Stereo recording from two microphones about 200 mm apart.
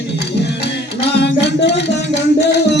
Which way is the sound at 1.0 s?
55° left (ahead or behind).